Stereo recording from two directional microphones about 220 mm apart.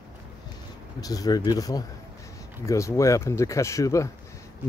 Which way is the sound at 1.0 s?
15° left (ahead or behind).